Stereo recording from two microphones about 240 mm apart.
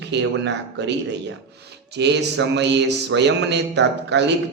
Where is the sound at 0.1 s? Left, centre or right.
Right.